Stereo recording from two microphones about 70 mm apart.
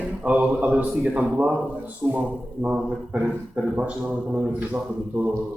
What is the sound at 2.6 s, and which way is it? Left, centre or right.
Speech, centre.